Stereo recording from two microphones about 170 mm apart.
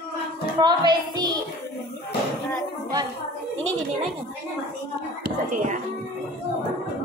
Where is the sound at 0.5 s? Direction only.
25° right (ahead or behind).